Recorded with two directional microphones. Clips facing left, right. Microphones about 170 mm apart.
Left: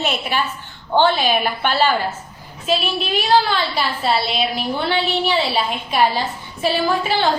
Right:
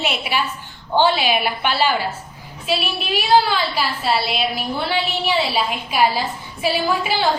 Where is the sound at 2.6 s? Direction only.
5° right (ahead or behind).